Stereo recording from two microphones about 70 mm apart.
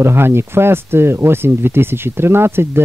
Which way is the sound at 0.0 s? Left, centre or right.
Right.